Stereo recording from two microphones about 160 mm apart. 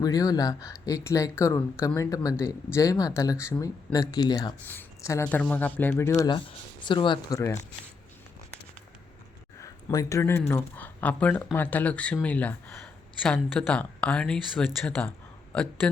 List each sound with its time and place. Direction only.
0.0 s speech: 25° left (ahead or behind)
4.7 s a sound: 15° left (ahead or behind)
5.2 s speech: 10° left (ahead or behind)
9.6 s speech: 20° left (ahead or behind); by 16.0 s 5° left (ahead or behind)